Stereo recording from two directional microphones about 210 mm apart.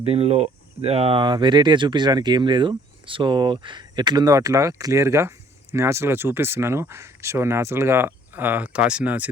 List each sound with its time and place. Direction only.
0.0 s speech: 30° right (ahead or behind); by 9.3 s 5° right (ahead or behind)